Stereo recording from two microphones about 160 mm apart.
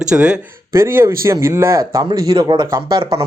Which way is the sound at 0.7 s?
15° right (ahead or behind).